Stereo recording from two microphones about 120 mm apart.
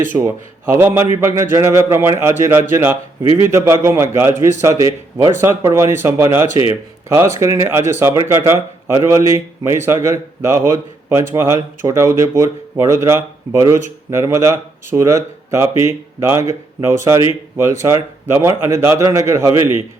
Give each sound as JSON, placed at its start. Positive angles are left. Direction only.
{"t": 0.1, "sound": "speech", "side_deg": -15}
{"t": 4.4, "sound": "speech", "side_deg": 90}
{"t": 4.6, "sound": "speech", "side_deg": -25}